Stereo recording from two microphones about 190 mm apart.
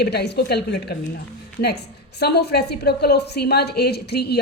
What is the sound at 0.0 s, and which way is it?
Speech, 60° left (ahead or behind).